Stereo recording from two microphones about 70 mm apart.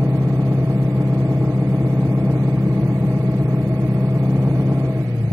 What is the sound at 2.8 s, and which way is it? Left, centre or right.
Vehicle, right.